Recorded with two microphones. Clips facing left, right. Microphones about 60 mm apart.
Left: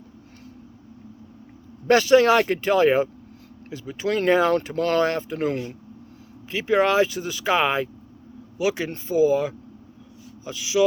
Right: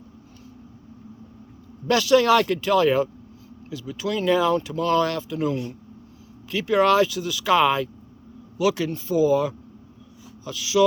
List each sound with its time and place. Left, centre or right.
1.9 s speech: left
6.5 s speech: left